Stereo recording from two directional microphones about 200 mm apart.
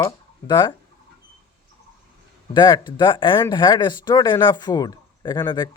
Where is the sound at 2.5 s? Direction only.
25° left (ahead or behind).